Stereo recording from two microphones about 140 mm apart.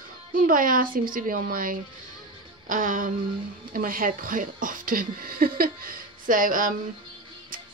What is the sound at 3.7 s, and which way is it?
Speech, 90° right.